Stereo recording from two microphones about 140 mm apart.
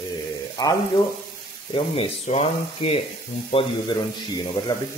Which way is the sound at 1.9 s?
45° left (ahead or behind).